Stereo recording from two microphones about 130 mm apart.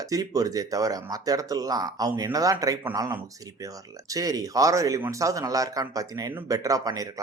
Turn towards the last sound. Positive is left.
turn(degrees=-30)  # may be behind; listen again after turning